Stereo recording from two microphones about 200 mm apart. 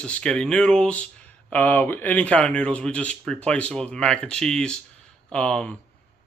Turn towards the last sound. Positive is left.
turn(degrees=5)  # may be behind; listen again after turning